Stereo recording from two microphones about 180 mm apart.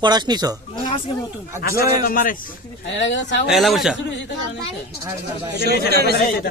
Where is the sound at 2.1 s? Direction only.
50° left (ahead or behind).